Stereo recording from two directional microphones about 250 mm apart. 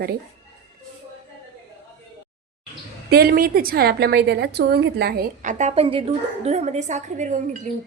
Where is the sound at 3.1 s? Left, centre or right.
Right.